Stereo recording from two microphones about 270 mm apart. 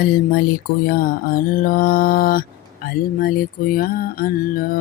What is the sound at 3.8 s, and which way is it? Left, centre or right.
Mantra, left.